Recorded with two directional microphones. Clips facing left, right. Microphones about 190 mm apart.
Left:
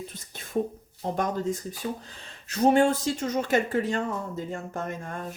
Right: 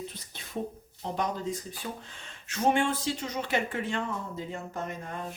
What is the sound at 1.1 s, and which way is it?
Speech, 50° left (ahead or behind).